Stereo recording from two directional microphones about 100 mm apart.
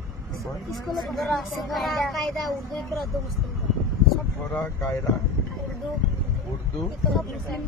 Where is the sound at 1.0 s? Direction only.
Centre (ahead or behind).